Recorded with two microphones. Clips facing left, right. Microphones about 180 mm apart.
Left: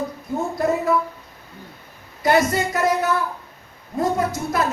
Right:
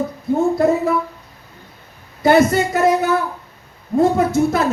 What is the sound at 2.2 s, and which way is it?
Speech, 25° right (ahead or behind).